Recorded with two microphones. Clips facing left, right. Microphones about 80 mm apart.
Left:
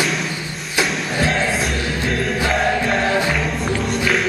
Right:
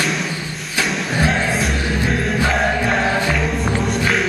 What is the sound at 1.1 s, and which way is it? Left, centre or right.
Choir, centre.